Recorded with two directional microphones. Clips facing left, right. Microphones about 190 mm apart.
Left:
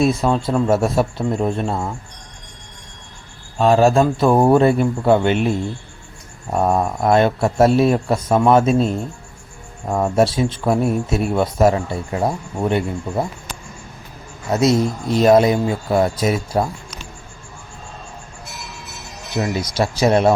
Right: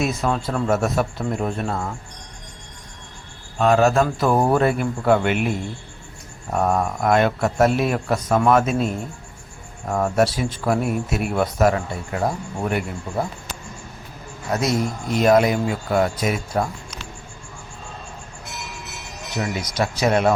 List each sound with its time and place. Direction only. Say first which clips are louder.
0.0 s speech: left 5 dB; 30° left (ahead or behind)
3.6 s speech: left 3 dB; 30° left (ahead or behind)
14.5 s speech: left 6 dB; 25° left (ahead or behind)
19.5 s speech: left 4 dB; 30° left (ahead or behind)